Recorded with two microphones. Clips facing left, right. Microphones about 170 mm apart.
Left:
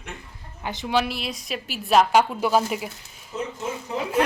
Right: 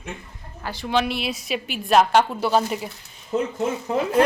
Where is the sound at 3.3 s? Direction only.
60° right (ahead or behind).